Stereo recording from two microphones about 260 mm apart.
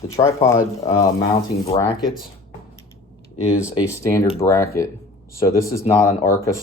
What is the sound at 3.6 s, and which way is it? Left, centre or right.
Speech, centre.